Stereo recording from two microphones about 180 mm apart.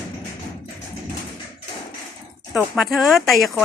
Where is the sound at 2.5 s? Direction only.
5° right (ahead or behind).